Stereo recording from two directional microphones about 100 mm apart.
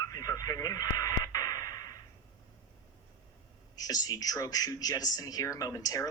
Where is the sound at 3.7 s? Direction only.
40° left (ahead or behind).